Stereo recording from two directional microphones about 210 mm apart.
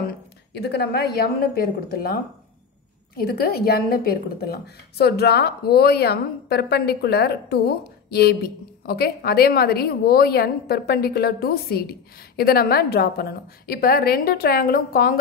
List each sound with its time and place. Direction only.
0.5 s a woman's voice: 50° left (ahead or behind)
3.2 s a woman's voice: 45° left (ahead or behind)